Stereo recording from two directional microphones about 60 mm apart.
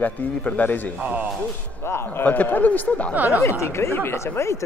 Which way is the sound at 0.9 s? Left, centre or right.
Right.